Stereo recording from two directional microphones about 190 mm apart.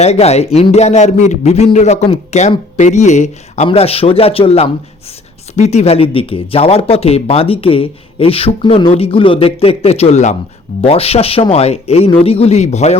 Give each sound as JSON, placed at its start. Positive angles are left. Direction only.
{"t": 0.0, "sound": "speech", "side_deg": 35}